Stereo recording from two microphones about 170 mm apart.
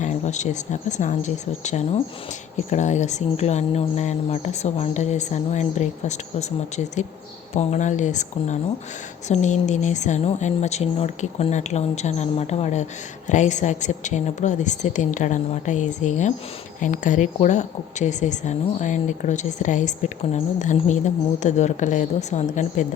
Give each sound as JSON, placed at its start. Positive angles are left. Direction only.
{"t": 0.0, "sound": "a woman's voice", "side_deg": 45}